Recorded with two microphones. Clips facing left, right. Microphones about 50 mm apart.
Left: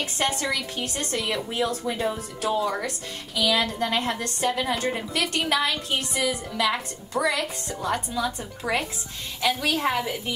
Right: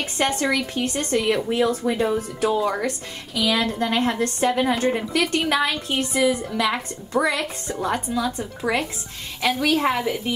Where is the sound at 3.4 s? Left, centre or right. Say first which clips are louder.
Right 2 dB; right.